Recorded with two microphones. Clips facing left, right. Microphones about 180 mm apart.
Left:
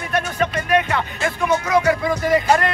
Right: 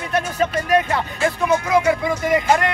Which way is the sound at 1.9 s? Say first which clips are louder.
Left 1 dB; 20° right (ahead or behind).